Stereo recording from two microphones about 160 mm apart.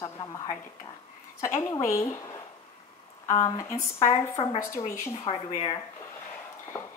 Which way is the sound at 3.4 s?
20° left (ahead or behind).